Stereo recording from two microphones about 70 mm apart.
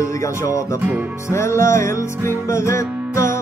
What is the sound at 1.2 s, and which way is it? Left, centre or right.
Music, left.